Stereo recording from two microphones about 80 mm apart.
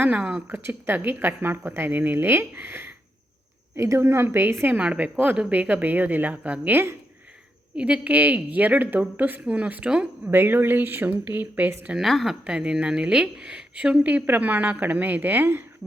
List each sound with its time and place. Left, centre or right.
0.0 s speech: centre
0.5 s a woman's voice: right
4.7 s a woman's voice: centre
7.8 s a woman's voice: centre
11.9 s speech: centre; by 15.9 s right